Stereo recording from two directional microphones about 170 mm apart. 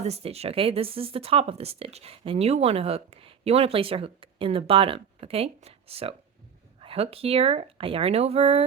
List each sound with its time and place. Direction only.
0.0 s speech: 35° right (ahead or behind)